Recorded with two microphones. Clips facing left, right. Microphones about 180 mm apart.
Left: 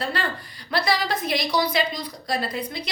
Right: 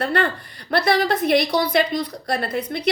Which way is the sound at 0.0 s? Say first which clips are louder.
Right 6 dB; 60° right (ahead or behind).